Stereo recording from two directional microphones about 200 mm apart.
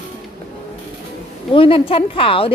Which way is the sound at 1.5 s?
25° left (ahead or behind).